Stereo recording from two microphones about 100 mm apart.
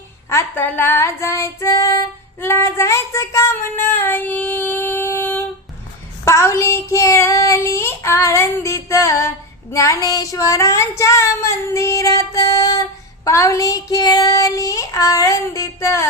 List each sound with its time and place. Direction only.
0.3 s female singing: 25° left (ahead or behind)
6.2 s child singing: 30° left (ahead or behind)
9.7 s a sound: 35° left (ahead or behind)